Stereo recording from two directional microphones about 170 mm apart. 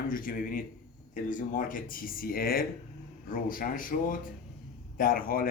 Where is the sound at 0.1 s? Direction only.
55° left (ahead or behind).